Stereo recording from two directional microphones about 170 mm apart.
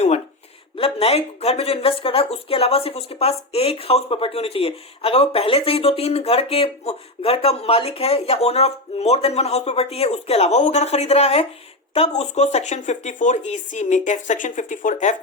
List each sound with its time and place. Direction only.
0.8 s speech: 35° left (ahead or behind)